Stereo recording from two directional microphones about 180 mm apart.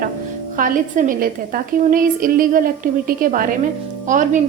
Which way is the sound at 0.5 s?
45° right (ahead or behind).